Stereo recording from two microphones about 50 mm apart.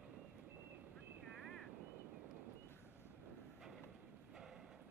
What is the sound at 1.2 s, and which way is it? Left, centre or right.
Vehicle, centre.